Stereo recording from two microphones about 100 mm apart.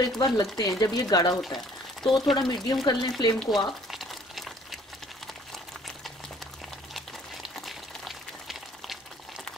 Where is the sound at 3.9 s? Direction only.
Centre (ahead or behind).